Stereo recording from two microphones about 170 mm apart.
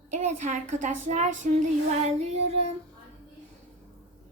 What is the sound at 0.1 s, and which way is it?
A woman's voice, 45° right (ahead or behind).